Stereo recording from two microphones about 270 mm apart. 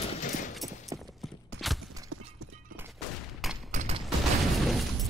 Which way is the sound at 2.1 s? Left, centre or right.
Right.